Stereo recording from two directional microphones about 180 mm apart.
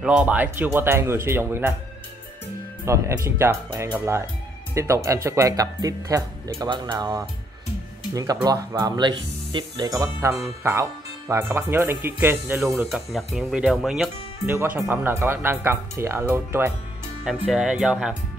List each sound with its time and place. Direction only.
0.0 s speech: 5° right (ahead or behind)
2.8 s speech: 15° right (ahead or behind)
12.7 s speech: centre (ahead or behind)
17.5 s speech: 5° right (ahead or behind)